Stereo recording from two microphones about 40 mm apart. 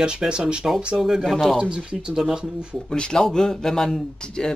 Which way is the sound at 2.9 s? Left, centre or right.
Centre.